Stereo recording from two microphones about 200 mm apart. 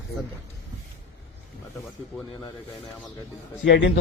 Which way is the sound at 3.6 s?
55° left (ahead or behind).